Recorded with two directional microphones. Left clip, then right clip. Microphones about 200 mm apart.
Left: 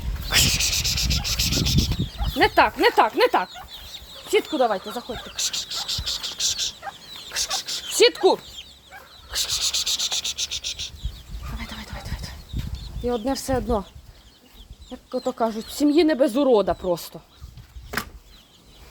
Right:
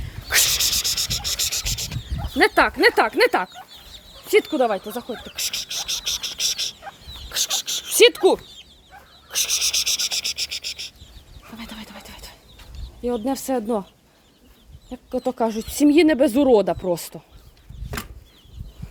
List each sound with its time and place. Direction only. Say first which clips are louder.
0.3 s rub: right 1 dB; 40° right (ahead or behind)
2.4 s speech: right 1 dB; 40° right (ahead or behind)
6.1 s cricket: right 2 dB; 40° right (ahead or behind)
7.3 s chicken: right 3 dB; 45° right (ahead or behind)
7.9 s speech: right 3 dB; 40° right (ahead or behind)
9.3 s insect: right 2 dB; 35° right (ahead or behind)
10.2 s cricket: right 1 dB; 35° right (ahead or behind)
11.5 s bird: left 1 dB; 30° right (ahead or behind)
13.1 s speech: even; 25° right (ahead or behind)
15.1 s speech: right 2 dB; 40° right (ahead or behind)